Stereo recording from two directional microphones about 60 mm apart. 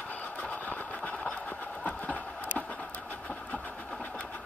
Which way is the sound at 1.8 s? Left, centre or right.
Left.